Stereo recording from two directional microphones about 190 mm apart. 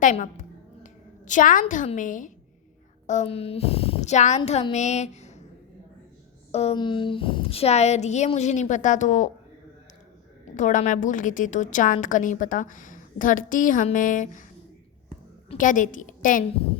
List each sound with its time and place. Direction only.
0.0 s a woman's voice: 40° left (ahead or behind)
6.5 s a woman's voice: 35° left (ahead or behind)
10.5 s a woman's voice: 40° left (ahead or behind)
15.5 s a woman's voice: 45° left (ahead or behind)